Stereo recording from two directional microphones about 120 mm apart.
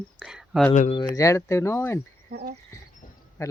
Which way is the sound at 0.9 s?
35° left (ahead or behind).